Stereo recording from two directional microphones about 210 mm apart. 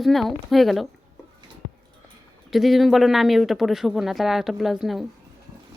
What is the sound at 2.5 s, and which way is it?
Speech, centre (ahead or behind).